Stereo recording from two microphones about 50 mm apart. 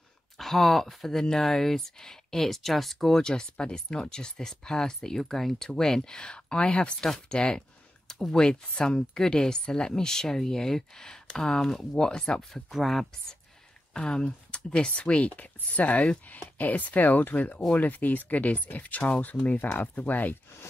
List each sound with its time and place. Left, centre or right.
0.4 s speech: centre
3.2 s speech: centre
12.7 s speech: centre
13.9 s speech: centre; by 17.6 s left
17.6 s speech: left
17.8 s speech: left